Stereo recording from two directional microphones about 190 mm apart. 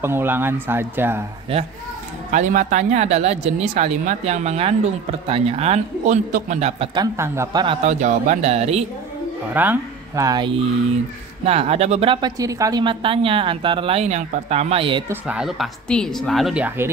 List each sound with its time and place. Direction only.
0.0 s speech: 10° right (ahead or behind)
1.5 s a woman's voice: 30° right (ahead or behind)
2.3 s speech: 40° right (ahead or behind)
7.2 s speech: 15° right (ahead or behind)
7.6 s speech: 35° right (ahead or behind)
9.5 s a woman's voice: 10° right (ahead or behind); by 15.0 s 25° right (ahead or behind)
15.0 s a woman's voice: 5° right (ahead or behind)